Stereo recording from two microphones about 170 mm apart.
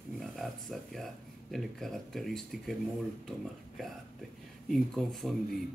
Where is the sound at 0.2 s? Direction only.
Centre (ahead or behind).